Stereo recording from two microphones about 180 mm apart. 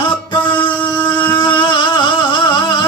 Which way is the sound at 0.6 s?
25° left (ahead or behind).